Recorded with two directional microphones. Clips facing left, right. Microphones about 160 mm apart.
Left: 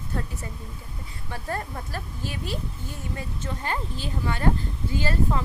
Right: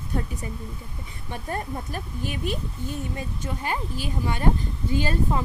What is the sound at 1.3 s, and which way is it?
A woman's voice, 20° right (ahead or behind).